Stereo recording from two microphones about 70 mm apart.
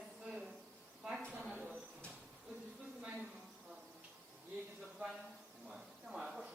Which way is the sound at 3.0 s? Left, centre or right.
Centre.